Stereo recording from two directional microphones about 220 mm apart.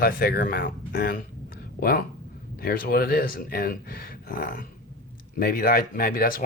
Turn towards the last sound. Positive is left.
turn(degrees=40)  # may be behind; listen again after turning